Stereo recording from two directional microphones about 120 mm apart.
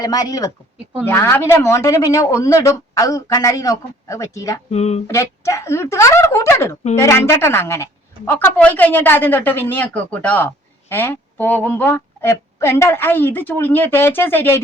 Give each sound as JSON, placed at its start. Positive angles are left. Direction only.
{"t": 0.0, "sound": "speech", "side_deg": 30}
{"t": 1.0, "sound": "speech", "side_deg": 20}
{"t": 4.7, "sound": "a sound", "side_deg": 65}
{"t": 5.0, "sound": "a woman's voice", "side_deg": 25}